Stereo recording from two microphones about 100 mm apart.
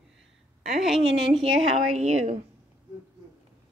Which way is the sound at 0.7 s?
5° right (ahead or behind).